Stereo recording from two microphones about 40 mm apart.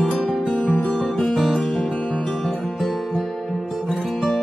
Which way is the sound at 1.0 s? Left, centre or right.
Centre.